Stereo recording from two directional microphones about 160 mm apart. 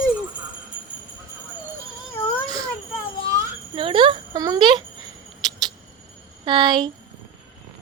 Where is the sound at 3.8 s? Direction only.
30° right (ahead or behind).